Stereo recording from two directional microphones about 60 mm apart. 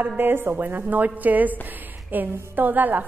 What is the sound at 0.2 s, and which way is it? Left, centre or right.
A woman's voice, right.